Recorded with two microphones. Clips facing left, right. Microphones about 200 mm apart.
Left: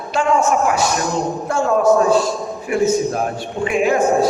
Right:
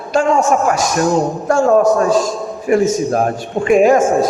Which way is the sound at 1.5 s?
45° right (ahead or behind).